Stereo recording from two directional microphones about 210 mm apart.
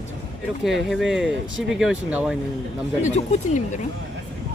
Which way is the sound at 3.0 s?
35° left (ahead or behind).